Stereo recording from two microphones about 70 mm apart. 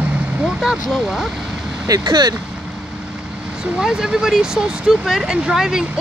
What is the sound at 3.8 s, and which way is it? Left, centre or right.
Speech, centre.